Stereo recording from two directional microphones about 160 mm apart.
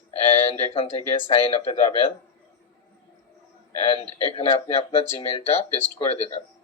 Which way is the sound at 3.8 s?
35° left (ahead or behind).